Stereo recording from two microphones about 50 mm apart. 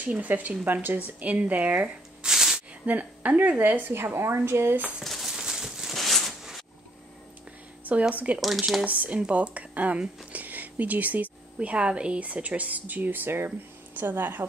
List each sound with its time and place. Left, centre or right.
0.0 s speech: right
2.2 s a sound: centre
2.8 s speech: right
3.9 s a woman's voice: right
5.0 s a sound: centre
8.1 s speech: right
8.4 s speech: centre
8.8 s a woman's voice: right